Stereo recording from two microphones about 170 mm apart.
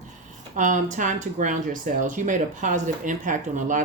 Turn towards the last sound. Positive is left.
turn(degrees=-50)  # may be behind; listen again after turning